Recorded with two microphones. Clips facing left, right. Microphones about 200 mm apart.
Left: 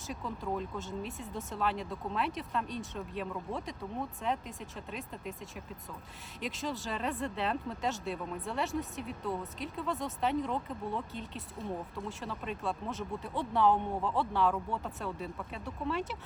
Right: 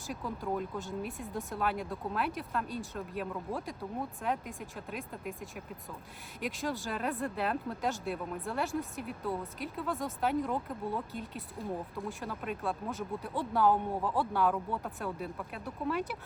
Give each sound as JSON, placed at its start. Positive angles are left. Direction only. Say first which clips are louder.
{"t": 0.1, "sound": "speech", "louder": "right 1 dB", "side_deg": 0}